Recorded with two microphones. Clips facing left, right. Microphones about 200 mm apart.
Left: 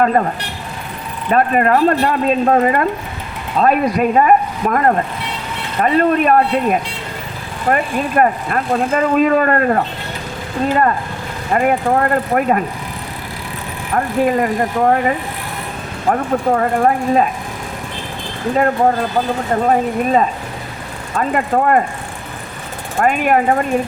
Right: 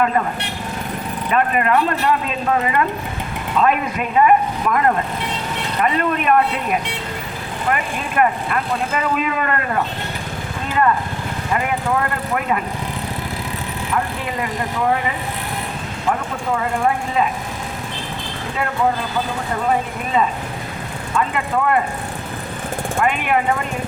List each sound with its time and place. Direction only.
0.0 s speech: 40° left (ahead or behind)
1.3 s speech: 40° left (ahead or behind)
13.9 s speech: 45° left (ahead or behind)
21.2 s speech: 45° left (ahead or behind)
23.0 s speech: 40° left (ahead or behind)